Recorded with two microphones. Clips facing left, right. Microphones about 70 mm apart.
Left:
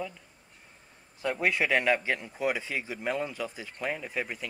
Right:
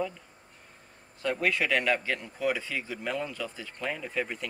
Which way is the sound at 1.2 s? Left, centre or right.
Centre.